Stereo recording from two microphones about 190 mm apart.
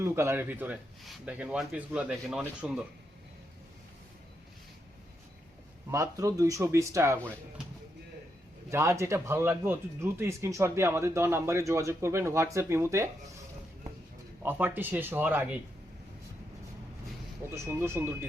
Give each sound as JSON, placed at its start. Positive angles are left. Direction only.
{"t": 0.0, "sound": "speech", "side_deg": -15}
{"t": 5.9, "sound": "speech", "side_deg": -15}
{"t": 8.7, "sound": "speech", "side_deg": -15}
{"t": 14.4, "sound": "speech", "side_deg": -10}
{"t": 17.5, "sound": "speech", "side_deg": -15}